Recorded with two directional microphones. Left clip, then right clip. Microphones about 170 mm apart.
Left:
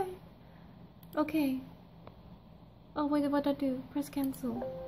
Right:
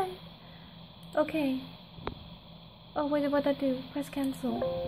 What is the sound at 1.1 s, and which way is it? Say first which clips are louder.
Speech: right 3 dB; 5° left (ahead or behind).